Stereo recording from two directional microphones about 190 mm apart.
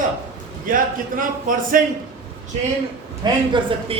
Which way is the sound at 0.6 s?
45° right (ahead or behind).